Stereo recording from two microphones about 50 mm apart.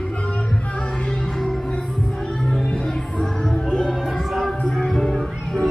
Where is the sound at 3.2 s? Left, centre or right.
Centre.